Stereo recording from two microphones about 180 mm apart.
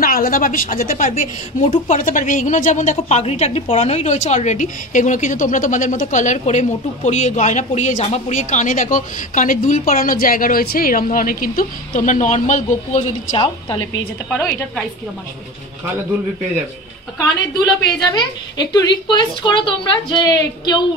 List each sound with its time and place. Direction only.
0.0 s a woman's voice: 50° left (ahead or behind)
13.3 s a woman's voice: 25° left (ahead or behind)
14.3 s a woman's voice: centre (ahead or behind)
18.1 s a woman's voice: 25° left (ahead or behind)